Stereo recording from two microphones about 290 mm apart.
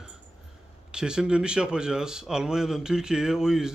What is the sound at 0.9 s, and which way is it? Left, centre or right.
A man's voice, centre.